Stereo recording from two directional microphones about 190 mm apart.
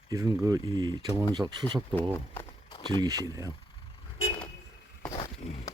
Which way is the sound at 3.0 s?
15° right (ahead or behind).